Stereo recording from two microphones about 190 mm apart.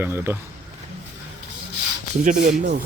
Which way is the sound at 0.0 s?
10° right (ahead or behind).